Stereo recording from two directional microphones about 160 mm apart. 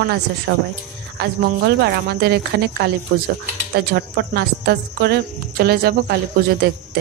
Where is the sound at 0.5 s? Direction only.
90° right.